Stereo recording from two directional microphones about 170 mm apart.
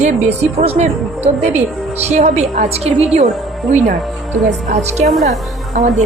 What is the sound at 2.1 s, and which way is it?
Speech, 45° right (ahead or behind).